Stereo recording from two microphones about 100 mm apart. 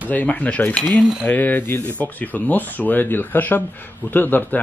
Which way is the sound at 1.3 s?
15° left (ahead or behind).